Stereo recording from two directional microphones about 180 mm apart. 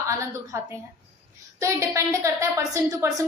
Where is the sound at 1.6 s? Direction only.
15° right (ahead or behind).